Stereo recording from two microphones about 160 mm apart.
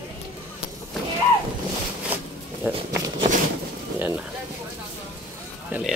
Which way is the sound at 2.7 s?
10° right (ahead or behind).